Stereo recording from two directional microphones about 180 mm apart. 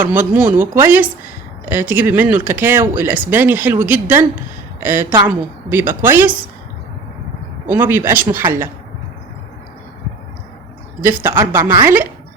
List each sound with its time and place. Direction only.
0.0 s speech: 10° right (ahead or behind)
7.7 s speech: 10° right (ahead or behind)
11.0 s speech: 10° right (ahead or behind)